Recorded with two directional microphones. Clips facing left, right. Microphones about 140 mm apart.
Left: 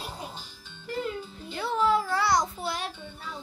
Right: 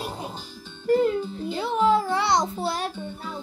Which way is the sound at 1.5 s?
20° right (ahead or behind).